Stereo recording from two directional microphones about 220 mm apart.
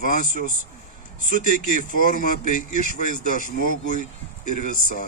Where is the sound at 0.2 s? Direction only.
40° right (ahead or behind).